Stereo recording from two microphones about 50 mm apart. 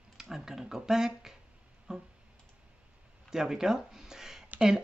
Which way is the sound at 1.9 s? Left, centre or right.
Centre.